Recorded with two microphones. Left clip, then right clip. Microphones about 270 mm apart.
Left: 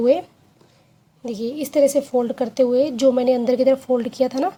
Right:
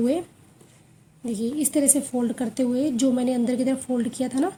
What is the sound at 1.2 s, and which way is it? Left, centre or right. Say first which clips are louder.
A woman's voice: left 1 dB; left.